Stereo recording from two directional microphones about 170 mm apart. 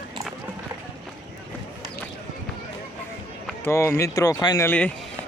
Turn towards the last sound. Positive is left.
turn(degrees=10)  # may be behind; listen again after turning